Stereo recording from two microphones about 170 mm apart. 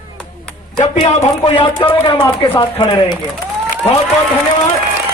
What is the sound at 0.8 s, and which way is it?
Speech, 35° left (ahead or behind).